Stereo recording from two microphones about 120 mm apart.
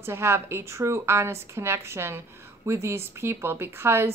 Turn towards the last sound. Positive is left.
turn(degrees=-20)  # may be behind; listen again after turning